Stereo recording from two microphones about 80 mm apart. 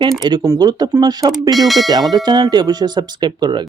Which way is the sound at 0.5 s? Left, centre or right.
Right.